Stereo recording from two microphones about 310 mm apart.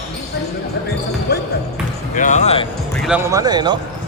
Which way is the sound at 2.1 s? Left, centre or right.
Left.